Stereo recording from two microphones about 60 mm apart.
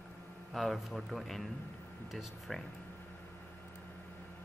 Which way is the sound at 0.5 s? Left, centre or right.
Centre.